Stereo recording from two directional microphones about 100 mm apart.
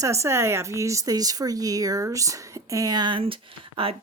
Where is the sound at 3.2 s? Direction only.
70° right (ahead or behind).